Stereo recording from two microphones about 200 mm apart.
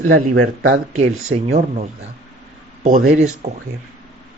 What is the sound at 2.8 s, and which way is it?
Speech, 40° right (ahead or behind).